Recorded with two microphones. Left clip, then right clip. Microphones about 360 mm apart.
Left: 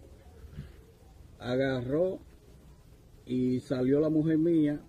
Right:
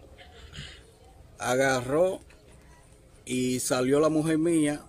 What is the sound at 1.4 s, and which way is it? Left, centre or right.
Speech, right.